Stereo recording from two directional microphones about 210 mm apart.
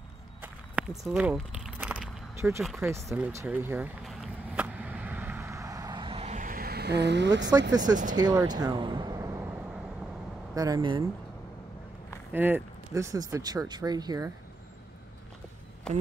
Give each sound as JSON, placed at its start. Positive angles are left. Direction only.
{"t": 0.4, "sound": "a sound", "side_deg": -5}
{"t": 2.8, "sound": "speech", "side_deg": -15}
{"t": 4.0, "sound": "vehicle", "side_deg": 0}
{"t": 7.7, "sound": "speech", "side_deg": -20}
{"t": 10.5, "sound": "speech", "side_deg": -15}
{"t": 12.3, "sound": "speech", "side_deg": -10}